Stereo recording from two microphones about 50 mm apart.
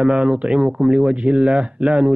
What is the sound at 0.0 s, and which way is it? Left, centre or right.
A man's voice, centre.